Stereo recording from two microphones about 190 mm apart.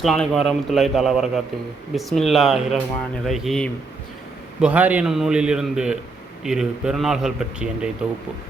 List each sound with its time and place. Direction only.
0.0 s a man's voice: centre (ahead or behind)